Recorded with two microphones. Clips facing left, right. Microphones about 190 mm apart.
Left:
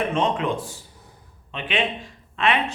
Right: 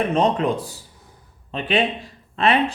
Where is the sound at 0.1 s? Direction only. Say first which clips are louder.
Right 4 dB; 35° right (ahead or behind).